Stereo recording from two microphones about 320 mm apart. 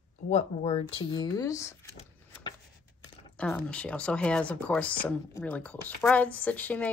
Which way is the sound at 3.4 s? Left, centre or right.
Centre.